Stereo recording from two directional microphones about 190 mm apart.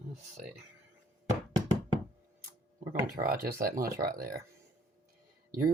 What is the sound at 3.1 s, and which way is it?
Speech, 50° right (ahead or behind).